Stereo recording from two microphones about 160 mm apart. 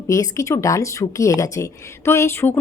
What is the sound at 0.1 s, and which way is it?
Speech, 20° left (ahead or behind).